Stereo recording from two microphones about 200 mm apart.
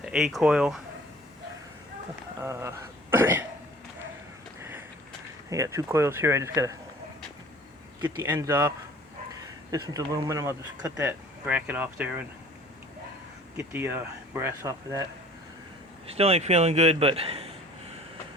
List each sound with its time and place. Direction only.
0.0 s speech: centre (ahead or behind)
2.4 s speech: 15° right (ahead or behind)
5.5 s speech: 15° right (ahead or behind)
8.1 s speech: 15° right (ahead or behind)
13.6 s speech: 10° right (ahead or behind)
16.1 s speech: 30° right (ahead or behind)